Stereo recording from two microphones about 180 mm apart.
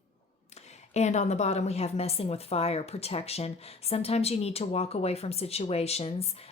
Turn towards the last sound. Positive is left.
turn(degrees=35)  # may be behind; listen again after turning